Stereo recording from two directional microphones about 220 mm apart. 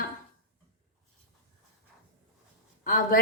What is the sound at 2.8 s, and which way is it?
Speech, 40° left (ahead or behind).